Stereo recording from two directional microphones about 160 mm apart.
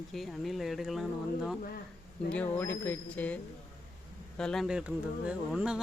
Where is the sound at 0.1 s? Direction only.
Centre (ahead or behind).